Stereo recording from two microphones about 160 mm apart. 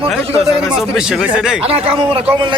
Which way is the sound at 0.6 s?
5° right (ahead or behind).